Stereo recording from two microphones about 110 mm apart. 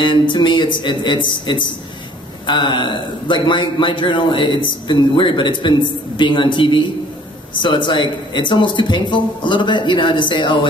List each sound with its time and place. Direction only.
0.0 s a man's voice: 45° left (ahead or behind)